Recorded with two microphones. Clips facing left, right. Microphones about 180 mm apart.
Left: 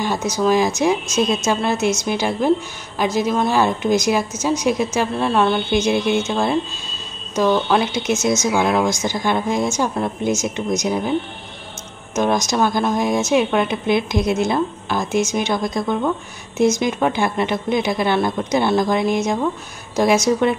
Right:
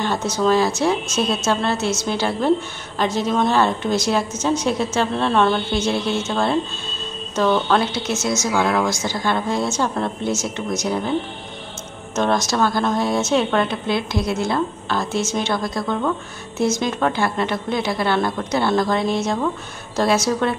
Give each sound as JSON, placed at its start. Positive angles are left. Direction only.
{"t": 0.0, "sound": "a woman's voice", "side_deg": 10}
{"t": 12.2, "sound": "a woman's voice", "side_deg": 15}